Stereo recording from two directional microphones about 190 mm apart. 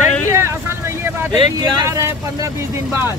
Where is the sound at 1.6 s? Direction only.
20° right (ahead or behind).